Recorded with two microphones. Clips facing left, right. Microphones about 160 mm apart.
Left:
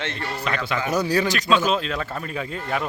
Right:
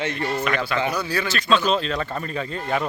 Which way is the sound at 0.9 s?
40° left (ahead or behind).